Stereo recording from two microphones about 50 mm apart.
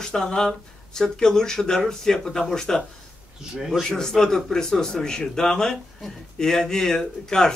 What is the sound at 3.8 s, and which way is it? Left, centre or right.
Speech, centre.